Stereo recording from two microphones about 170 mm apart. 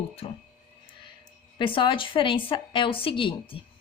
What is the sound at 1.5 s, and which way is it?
Speech, 30° left (ahead or behind).